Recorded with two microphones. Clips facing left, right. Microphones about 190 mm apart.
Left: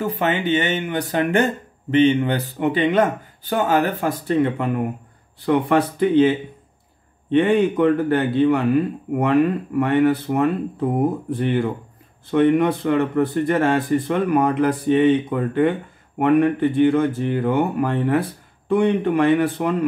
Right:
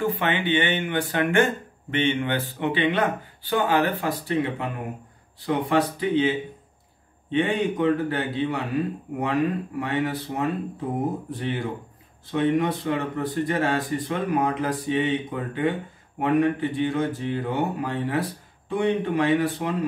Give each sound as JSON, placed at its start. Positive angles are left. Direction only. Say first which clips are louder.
{"t": 0.0, "sound": "speech", "louder": "left 3 dB", "side_deg": 40}
{"t": 5.7, "sound": "speech", "louder": "left 5 dB", "side_deg": 55}